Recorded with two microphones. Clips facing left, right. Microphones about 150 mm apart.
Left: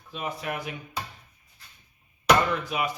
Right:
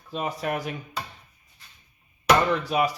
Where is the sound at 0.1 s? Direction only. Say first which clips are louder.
Right 4 dB; 40° right (ahead or behind).